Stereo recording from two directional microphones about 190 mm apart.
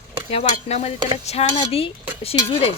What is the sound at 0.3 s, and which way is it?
Speech, 35° left (ahead or behind).